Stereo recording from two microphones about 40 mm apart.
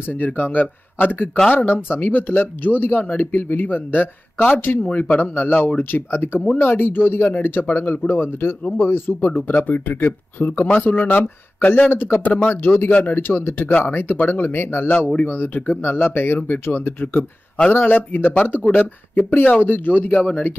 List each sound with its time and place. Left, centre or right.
0.0 s speech: left
4.7 s speech: left
5.0 s speech: left
8.7 s speech: left
9.5 s speech: left
11.9 s speech: left
12.2 s speech: left
13.0 s speech: left
13.8 s speech: left
14.9 s speech: left
15.2 s speech: left
15.8 s speech: left